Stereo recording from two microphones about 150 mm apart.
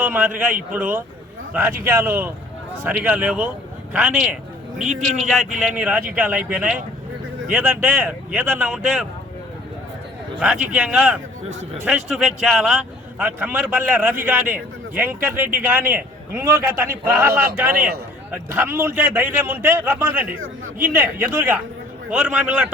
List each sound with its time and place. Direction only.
0.0 s a man's voice: 10° right (ahead or behind)
10.4 s speech: 5° right (ahead or behind)
11.4 s a man's voice: 45° right (ahead or behind)
11.9 s a man's voice: 5° right (ahead or behind)